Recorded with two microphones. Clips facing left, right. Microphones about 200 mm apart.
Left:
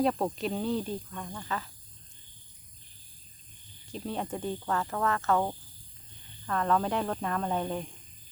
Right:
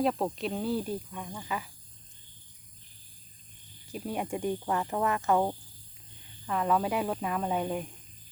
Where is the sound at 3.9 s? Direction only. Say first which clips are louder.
Right 1 dB; 10° right (ahead or behind).